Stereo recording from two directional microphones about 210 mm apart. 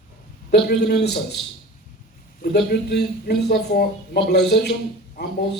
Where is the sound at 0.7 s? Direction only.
55° left (ahead or behind).